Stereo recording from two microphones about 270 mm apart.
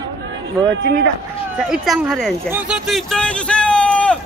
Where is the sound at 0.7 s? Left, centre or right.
Right.